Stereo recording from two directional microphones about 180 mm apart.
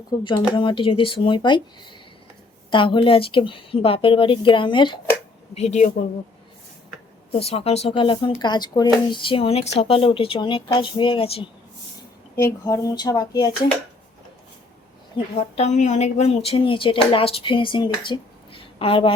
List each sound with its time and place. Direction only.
0.3 s speech: 25° left (ahead or behind)
5.5 s speech: 40° left (ahead or behind)
7.3 s speech: 35° left (ahead or behind)
12.4 s speech: 15° left (ahead or behind)
15.4 s speech: 40° left (ahead or behind)